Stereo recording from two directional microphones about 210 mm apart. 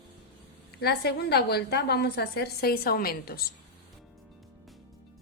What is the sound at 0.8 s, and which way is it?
A woman's voice, 50° left (ahead or behind).